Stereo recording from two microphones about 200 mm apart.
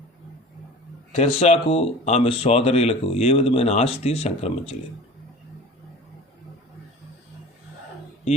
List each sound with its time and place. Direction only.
1.1 s speech: 30° left (ahead or behind)